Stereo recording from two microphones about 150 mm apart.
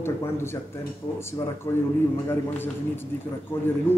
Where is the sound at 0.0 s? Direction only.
15° left (ahead or behind).